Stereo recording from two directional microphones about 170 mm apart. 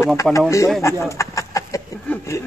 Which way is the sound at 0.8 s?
15° left (ahead or behind).